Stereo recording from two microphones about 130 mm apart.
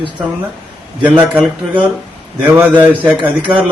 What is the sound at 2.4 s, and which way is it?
Speech, 10° right (ahead or behind).